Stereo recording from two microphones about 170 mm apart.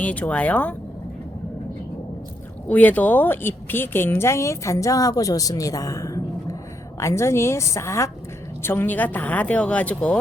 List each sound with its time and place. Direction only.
0.0 s speech: 10° left (ahead or behind)
2.6 s speech: 10° left (ahead or behind)